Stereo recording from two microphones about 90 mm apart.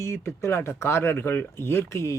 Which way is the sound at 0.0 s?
30° left (ahead or behind).